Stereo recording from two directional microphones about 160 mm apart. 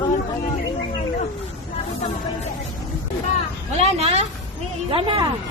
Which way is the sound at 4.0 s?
40° right (ahead or behind).